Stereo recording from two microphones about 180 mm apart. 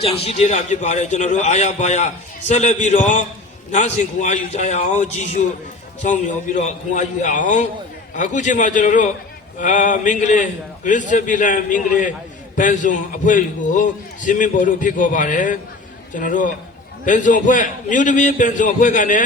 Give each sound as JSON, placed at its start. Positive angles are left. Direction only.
{"t": 0.3, "sound": "a man's voice", "side_deg": 35}